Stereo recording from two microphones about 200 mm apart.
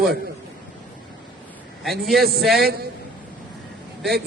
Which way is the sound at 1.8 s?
Centre (ahead or behind).